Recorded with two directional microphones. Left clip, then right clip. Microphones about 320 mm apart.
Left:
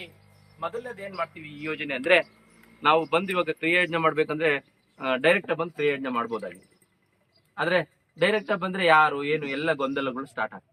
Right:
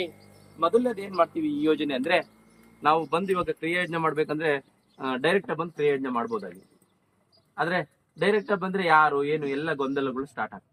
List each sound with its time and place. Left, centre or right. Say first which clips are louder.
0.7 s a man's voice: right 10 dB; right; by 10.6 s centre